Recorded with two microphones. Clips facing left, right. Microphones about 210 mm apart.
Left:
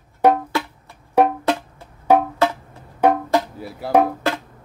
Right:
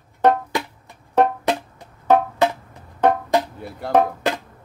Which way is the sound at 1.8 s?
15° right (ahead or behind).